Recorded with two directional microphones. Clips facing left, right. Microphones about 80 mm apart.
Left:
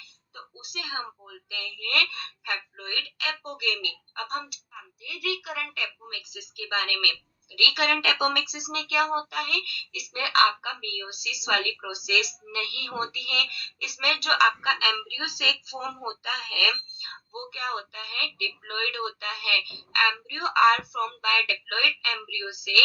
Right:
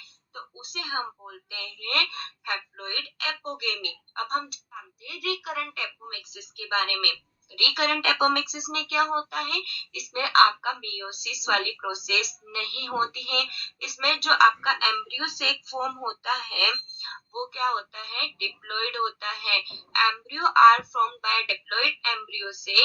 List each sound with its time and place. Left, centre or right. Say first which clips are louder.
0.3 s speech: right 2 dB; right